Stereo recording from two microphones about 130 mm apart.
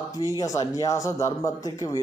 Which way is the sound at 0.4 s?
25° left (ahead or behind).